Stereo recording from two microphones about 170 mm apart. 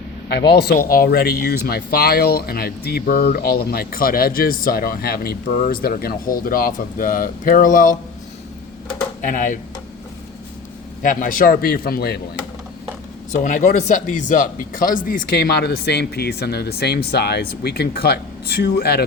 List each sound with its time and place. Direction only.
0.3 s speech: 75° left (ahead or behind); by 7.9 s 50° left (ahead or behind)
9.2 s speech: 50° left (ahead or behind)
11.0 s speech: 50° left (ahead or behind)
13.3 s speech: 50° left (ahead or behind); by 19.0 s 65° left (ahead or behind)